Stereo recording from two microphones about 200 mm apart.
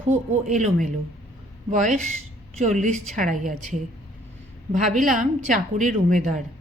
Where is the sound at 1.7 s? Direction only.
40° right (ahead or behind).